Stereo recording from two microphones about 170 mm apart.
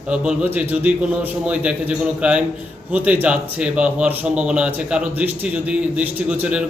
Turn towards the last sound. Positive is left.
turn(degrees=-10)  # may be behind; listen again after turning